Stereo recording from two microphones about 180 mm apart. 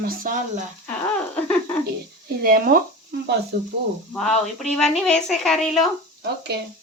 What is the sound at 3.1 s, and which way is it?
Speech, 65° right (ahead or behind).